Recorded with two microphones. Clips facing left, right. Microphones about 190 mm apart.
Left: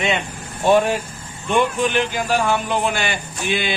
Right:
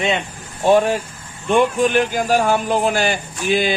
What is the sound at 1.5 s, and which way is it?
A man's voice, 45° right (ahead or behind).